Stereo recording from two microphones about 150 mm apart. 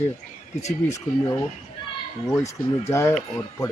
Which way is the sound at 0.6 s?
50° left (ahead or behind).